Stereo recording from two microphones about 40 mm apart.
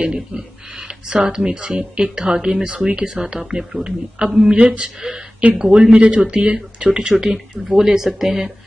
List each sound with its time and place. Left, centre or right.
0.0 s speech: right
4.6 s speech: right
7.1 s speech: centre